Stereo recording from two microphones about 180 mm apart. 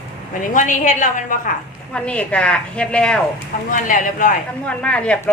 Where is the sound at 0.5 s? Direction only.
45° left (ahead or behind).